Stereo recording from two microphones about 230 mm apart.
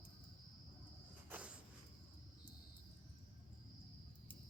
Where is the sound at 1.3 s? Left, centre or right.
Centre.